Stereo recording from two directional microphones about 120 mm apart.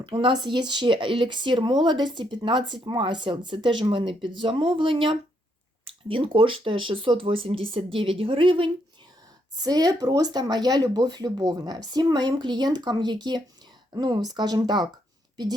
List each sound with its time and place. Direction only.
0.0 s speech: 45° right (ahead or behind)
9.6 s speech: 30° right (ahead or behind)